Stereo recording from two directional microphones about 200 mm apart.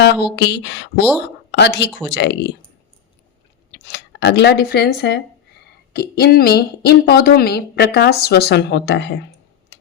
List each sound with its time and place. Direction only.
0.0 s speech: 65° left (ahead or behind)
1.5 s a sound: 60° left (ahead or behind)
2.1 s speech: 60° left (ahead or behind)
3.7 s a woman's voice: 60° left (ahead or behind)